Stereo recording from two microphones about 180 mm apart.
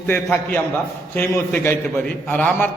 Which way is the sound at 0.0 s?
10° left (ahead or behind).